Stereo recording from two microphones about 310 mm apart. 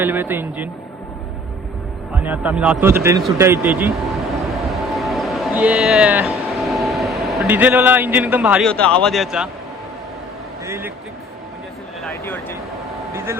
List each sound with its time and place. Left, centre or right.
0.0 s a man's voice: centre
2.2 s speech: centre
10.7 s a man's voice: centre
12.0 s speech: centre